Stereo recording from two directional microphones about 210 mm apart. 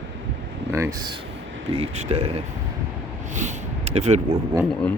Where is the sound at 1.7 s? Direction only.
30° right (ahead or behind).